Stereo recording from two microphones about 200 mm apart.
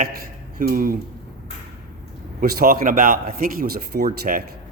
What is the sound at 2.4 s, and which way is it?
A man's voice, 45° right (ahead or behind).